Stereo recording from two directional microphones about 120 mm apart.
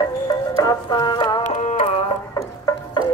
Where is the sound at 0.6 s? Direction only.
35° left (ahead or behind).